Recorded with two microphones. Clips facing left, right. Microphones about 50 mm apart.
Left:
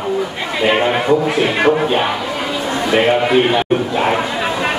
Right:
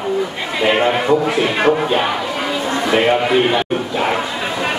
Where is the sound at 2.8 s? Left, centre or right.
Centre.